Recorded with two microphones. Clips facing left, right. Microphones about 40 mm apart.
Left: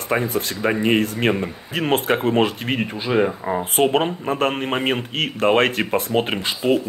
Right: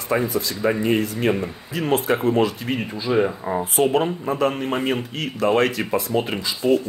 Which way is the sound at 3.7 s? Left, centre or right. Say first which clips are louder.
Left 1 dB; left.